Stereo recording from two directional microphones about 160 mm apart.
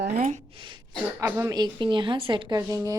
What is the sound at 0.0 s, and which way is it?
Speech, 65° right (ahead or behind).